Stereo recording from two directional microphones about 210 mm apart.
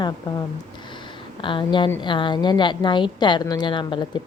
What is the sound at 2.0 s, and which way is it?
A woman's voice, 20° left (ahead or behind).